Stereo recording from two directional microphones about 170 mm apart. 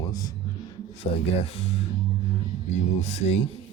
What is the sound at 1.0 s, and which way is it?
Speech, 35° left (ahead or behind).